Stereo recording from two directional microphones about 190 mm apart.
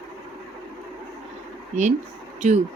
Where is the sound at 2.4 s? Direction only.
40° right (ahead or behind).